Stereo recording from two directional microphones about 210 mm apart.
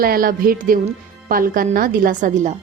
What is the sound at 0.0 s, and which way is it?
A woman's voice, 45° right (ahead or behind).